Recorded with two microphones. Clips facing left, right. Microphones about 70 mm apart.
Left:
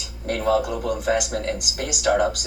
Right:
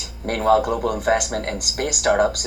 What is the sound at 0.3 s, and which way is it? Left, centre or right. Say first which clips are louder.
Speech: right 4 dB; right.